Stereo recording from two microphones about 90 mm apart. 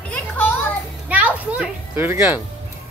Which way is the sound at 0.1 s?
20° left (ahead or behind).